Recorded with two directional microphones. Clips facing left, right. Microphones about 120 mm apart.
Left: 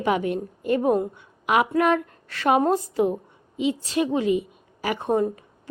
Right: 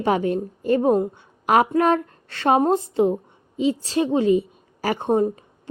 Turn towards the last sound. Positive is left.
turn(degrees=-30)  # may be behind; listen again after turning